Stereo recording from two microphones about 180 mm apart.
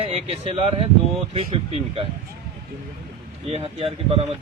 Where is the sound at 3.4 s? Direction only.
35° right (ahead or behind).